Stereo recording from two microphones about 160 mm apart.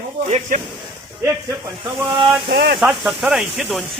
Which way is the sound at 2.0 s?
30° right (ahead or behind).